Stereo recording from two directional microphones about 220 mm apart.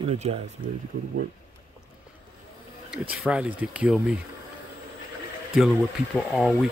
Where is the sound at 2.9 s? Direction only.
5° right (ahead or behind).